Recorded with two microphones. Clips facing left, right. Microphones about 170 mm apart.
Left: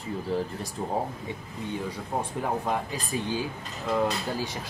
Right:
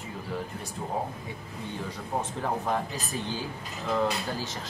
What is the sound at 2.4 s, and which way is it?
Speech, 10° left (ahead or behind).